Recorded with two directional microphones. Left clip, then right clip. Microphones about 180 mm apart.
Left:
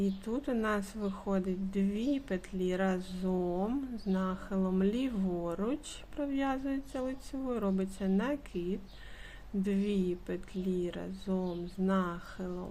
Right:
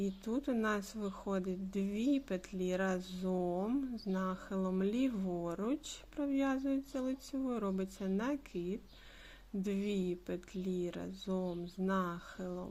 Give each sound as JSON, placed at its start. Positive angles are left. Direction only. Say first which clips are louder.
{"t": 0.0, "sound": "speech", "louder": "left 3 dB", "side_deg": -20}